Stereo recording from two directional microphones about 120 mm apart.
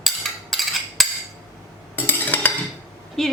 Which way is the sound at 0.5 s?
Centre (ahead or behind).